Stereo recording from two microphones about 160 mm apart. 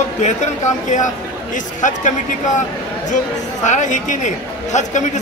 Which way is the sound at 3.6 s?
50° left (ahead or behind).